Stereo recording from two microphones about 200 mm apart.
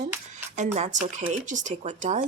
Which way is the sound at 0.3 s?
35° right (ahead or behind).